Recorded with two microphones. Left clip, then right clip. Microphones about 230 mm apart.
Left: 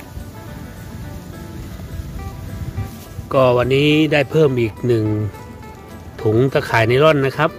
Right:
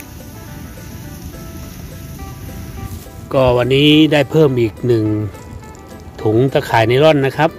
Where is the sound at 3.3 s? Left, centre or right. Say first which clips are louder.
Right 1 dB; centre.